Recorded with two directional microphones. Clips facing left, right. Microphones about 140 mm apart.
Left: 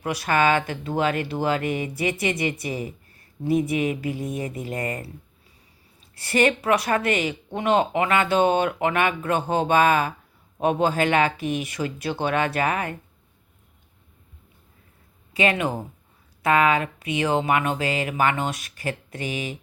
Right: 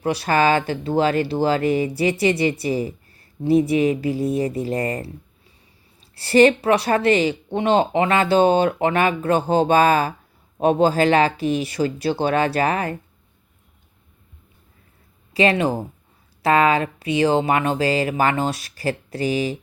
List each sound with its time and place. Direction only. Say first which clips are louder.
0.0 s speech: right 3 dB; 30° right (ahead or behind)
6.1 s speech: right 7 dB; 30° right (ahead or behind)
15.3 s speech: right 4 dB; 35° right (ahead or behind)